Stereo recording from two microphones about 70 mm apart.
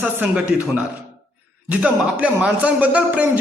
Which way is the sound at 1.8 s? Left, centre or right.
Centre.